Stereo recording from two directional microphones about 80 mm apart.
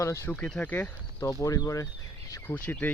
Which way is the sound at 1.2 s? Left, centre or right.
Left.